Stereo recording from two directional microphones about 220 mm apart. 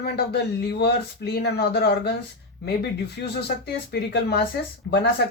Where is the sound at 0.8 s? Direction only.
50° left (ahead or behind).